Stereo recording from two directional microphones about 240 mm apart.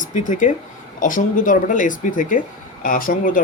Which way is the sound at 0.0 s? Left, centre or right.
Left.